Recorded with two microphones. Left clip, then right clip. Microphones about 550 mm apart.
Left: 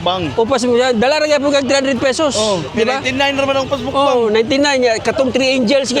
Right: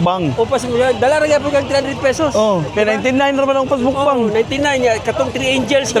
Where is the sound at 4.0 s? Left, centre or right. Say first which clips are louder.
Left 6 dB; left.